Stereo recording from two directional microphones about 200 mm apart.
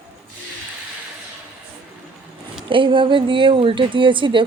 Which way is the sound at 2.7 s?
25° right (ahead or behind).